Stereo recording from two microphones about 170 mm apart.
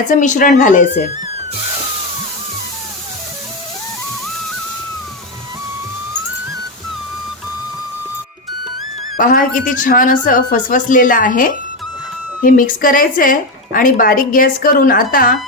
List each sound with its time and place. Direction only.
0.1 s a woman's voice: 50° left (ahead or behind)
9.1 s a woman's voice: 55° left (ahead or behind)